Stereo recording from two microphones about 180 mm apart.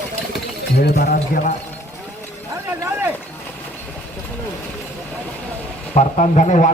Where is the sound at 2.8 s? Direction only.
15° right (ahead or behind).